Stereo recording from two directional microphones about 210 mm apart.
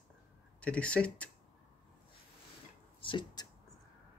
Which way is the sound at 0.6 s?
5° left (ahead or behind).